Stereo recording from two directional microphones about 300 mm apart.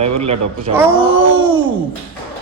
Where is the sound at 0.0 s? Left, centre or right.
Right.